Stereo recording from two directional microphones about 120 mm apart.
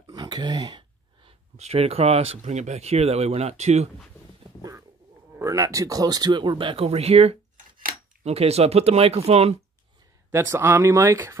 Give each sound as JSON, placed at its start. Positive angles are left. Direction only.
{"t": 0.0, "sound": "a sound", "side_deg": -35}
{"t": 1.6, "sound": "speech", "side_deg": -60}
{"t": 4.6, "sound": "cat", "side_deg": -30}
{"t": 5.3, "sound": "speech", "side_deg": -25}
{"t": 10.3, "sound": "speech", "side_deg": -20}